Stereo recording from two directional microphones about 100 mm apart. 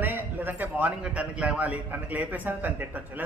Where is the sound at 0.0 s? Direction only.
20° right (ahead or behind).